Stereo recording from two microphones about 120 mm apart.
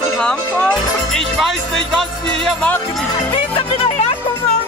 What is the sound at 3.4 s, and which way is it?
Music, 50° left (ahead or behind).